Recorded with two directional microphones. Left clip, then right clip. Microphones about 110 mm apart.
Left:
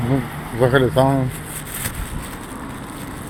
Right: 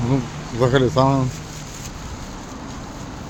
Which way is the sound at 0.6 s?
40° right (ahead or behind).